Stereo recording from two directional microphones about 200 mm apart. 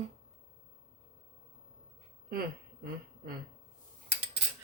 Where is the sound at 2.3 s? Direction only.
50° right (ahead or behind).